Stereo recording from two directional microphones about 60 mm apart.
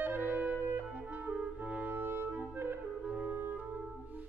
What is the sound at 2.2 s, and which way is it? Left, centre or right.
Clarinet, right.